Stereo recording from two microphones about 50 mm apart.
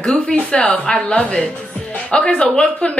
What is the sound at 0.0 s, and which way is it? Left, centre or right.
A woman's voice, centre.